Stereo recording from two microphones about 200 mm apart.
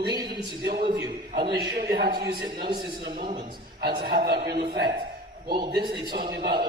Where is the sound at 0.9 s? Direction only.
20° right (ahead or behind).